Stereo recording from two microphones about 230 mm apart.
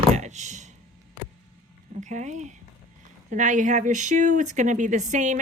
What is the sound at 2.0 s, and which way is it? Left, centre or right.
A woman's voice, right.